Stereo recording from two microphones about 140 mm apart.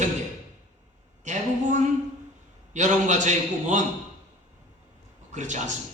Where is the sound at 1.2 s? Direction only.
60° right (ahead or behind).